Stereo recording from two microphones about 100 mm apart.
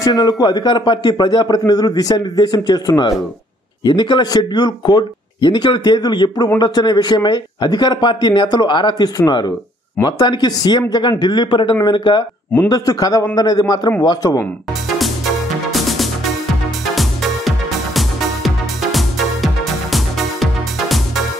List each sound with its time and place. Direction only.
0.0 s a man's voice: 40° left (ahead or behind)
12.6 s a man's voice: 40° left (ahead or behind)
15.0 s music: centre (ahead or behind)